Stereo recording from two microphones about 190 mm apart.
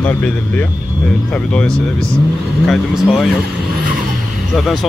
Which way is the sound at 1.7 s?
15° right (ahead or behind).